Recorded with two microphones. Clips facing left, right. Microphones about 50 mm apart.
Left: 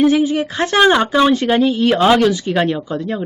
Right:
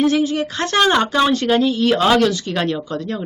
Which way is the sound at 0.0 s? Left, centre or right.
Centre.